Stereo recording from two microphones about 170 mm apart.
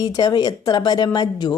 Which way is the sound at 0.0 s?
25° left (ahead or behind).